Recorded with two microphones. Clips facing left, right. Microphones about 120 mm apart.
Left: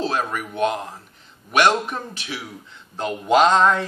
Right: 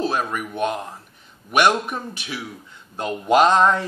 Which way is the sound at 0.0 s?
10° right (ahead or behind).